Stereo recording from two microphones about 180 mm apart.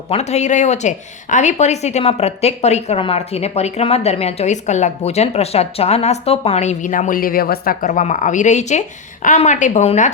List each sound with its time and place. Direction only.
0.1 s speech: 35° left (ahead or behind)